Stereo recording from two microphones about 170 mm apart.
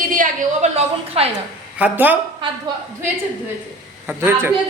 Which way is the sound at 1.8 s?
10° right (ahead or behind).